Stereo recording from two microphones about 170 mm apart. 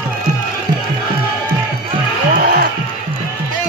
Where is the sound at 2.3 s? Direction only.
60° right (ahead or behind).